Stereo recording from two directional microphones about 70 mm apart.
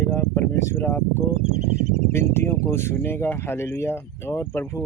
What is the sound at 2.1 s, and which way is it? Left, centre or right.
Speech, left.